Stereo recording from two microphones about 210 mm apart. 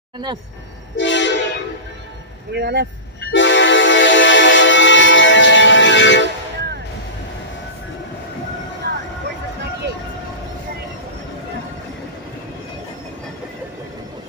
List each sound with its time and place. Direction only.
0.9 s train: 60° left (ahead or behind)
2.5 s speech: 50° right (ahead or behind)
3.2 s music: 55° left (ahead or behind)
8.8 s vehicle: 50° right (ahead or behind)